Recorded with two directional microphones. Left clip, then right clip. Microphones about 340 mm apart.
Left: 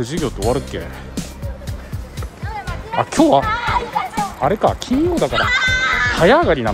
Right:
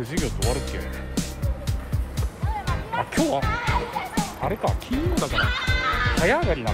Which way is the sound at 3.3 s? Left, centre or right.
Left.